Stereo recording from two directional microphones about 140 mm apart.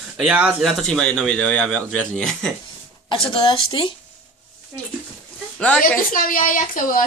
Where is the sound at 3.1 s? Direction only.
40° left (ahead or behind).